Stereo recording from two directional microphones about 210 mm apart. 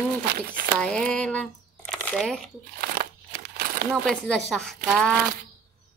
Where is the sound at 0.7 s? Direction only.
5° left (ahead or behind).